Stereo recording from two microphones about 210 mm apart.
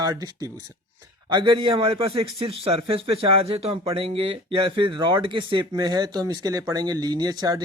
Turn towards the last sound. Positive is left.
turn(degrees=-20)  # may be behind; listen again after turning